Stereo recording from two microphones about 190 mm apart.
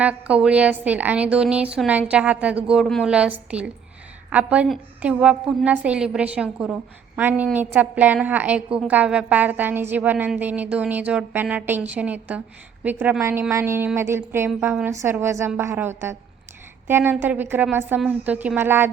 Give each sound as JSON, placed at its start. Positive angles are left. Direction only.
{"t": 0.0, "sound": "a woman's voice", "side_deg": -5}